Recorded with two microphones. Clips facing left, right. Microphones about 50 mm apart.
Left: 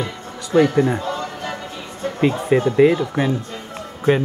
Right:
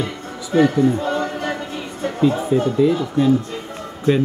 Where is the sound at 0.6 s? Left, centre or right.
Left.